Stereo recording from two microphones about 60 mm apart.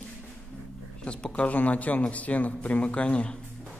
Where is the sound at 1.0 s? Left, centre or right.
Centre.